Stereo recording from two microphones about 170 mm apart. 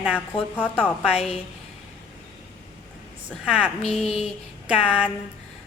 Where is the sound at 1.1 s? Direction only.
35° left (ahead or behind).